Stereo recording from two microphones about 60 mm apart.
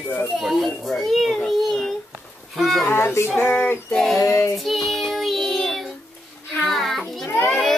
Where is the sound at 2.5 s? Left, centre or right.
Centre.